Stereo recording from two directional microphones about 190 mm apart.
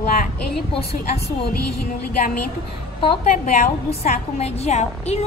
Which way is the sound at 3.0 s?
30° left (ahead or behind).